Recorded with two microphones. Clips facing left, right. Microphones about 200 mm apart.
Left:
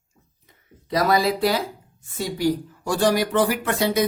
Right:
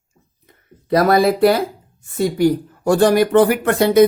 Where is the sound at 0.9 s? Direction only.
60° right (ahead or behind).